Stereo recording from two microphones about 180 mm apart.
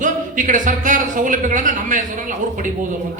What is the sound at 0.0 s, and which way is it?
Speech, 45° right (ahead or behind).